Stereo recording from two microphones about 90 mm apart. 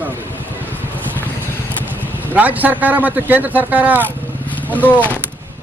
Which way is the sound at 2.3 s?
20° right (ahead or behind).